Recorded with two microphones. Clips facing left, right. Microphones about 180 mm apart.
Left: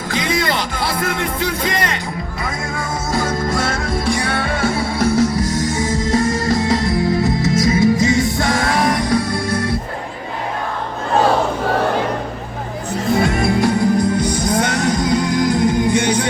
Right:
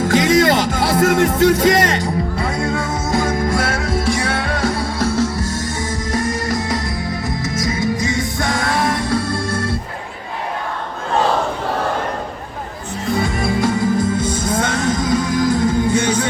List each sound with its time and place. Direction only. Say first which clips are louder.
0.1 s music: right 5 dB; 45° right (ahead or behind)
1.5 s speech: right 6 dB; 45° right (ahead or behind)
3.1 s music: right 2 dB; 15° right (ahead or behind); by 9.7 s 15° left (ahead or behind)
13.6 s music: even; 20° right (ahead or behind)
15.1 s music: right 2 dB; 20° left (ahead or behind)